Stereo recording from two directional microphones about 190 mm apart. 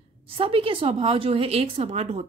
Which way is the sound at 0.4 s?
30° right (ahead or behind).